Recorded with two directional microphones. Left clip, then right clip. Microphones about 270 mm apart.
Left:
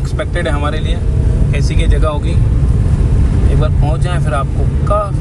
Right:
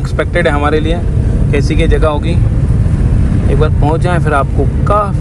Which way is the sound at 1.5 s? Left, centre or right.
Centre.